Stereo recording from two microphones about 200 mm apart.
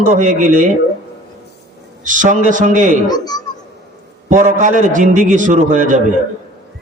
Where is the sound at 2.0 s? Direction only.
40° right (ahead or behind).